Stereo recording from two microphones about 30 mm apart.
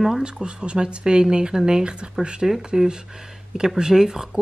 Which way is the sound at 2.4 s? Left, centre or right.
Centre.